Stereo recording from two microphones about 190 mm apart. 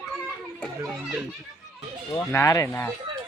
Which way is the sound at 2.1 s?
15° left (ahead or behind).